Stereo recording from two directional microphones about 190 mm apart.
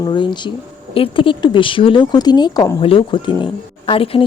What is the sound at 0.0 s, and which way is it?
Speech, 25° left (ahead or behind).